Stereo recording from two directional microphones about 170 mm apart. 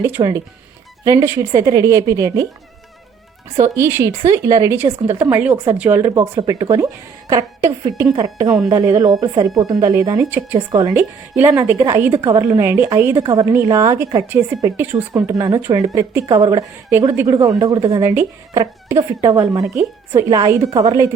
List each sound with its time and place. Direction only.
0.2 s a woman's voice: 30° right (ahead or behind)
3.8 s a woman's voice: 15° right (ahead or behind)